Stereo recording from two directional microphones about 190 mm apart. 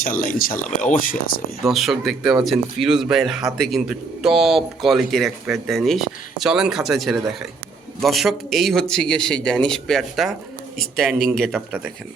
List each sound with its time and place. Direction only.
0.0 s speech: 45° left (ahead or behind)
1.6 s speech: centre (ahead or behind)